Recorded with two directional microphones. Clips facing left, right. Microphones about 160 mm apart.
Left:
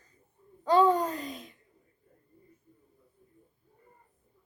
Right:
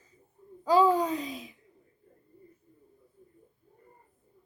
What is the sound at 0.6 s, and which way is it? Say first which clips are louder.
Speech: even; 5° right (ahead or behind).